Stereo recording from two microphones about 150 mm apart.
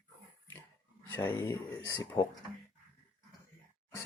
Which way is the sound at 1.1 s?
15° left (ahead or behind).